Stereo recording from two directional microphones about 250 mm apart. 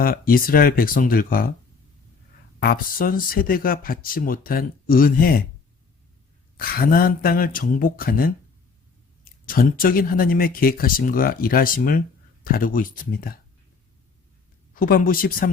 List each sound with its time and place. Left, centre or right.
0.0 s speech: left
2.6 s speech: left
6.6 s speech: left
9.5 s speech: left
14.8 s speech: left